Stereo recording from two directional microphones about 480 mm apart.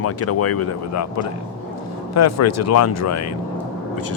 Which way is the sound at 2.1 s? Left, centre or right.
Left.